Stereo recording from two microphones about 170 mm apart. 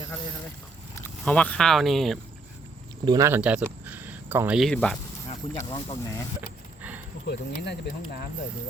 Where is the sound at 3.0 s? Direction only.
25° right (ahead or behind).